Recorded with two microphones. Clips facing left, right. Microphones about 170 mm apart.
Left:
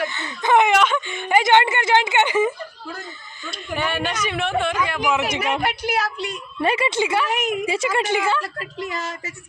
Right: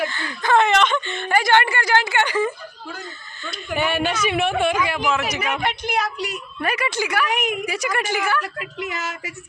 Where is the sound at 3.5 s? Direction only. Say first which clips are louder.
Right 2 dB; 5° right (ahead or behind).